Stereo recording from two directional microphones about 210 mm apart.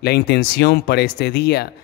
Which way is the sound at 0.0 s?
50° left (ahead or behind).